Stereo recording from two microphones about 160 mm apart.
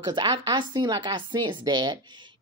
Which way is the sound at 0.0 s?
30° right (ahead or behind).